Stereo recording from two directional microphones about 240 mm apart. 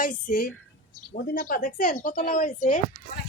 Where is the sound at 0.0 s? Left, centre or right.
Left.